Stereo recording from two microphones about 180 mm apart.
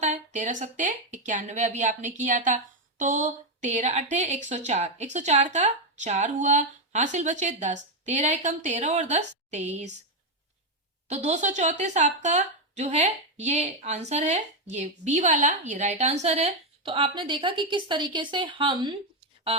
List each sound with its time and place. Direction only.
0.0 s a woman's voice: 40° right (ahead or behind)
11.1 s a woman's voice: 40° right (ahead or behind)